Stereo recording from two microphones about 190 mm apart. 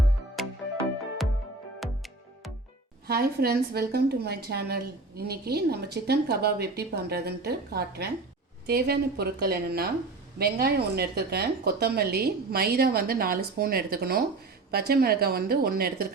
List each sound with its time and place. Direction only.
0.4 s music: centre (ahead or behind)
1.8 s music: centre (ahead or behind)
3.1 s a woman's voice: 55° right (ahead or behind)